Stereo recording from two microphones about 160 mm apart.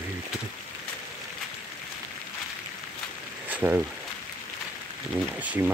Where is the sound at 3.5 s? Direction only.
10° right (ahead or behind).